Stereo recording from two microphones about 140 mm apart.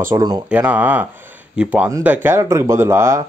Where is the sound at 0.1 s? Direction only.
30° right (ahead or behind).